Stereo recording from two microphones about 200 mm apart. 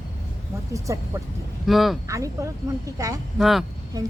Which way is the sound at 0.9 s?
15° right (ahead or behind).